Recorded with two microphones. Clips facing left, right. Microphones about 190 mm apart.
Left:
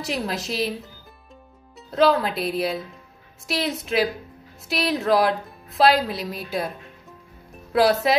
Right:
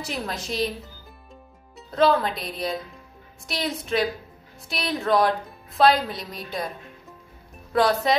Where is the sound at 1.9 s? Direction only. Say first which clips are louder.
Left 1 dB; centre (ahead or behind).